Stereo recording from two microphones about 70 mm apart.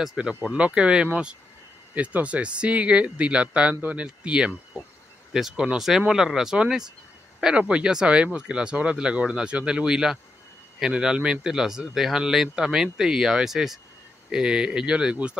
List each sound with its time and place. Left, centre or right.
0.0 s speech: centre